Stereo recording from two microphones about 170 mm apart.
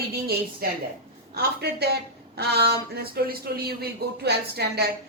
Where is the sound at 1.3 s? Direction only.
70° right (ahead or behind).